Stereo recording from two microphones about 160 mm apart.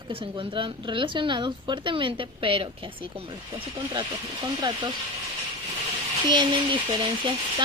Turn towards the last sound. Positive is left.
turn(degrees=-30)  # may be behind; listen again after turning